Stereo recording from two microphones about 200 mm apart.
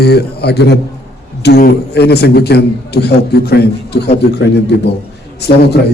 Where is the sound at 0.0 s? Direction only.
55° left (ahead or behind).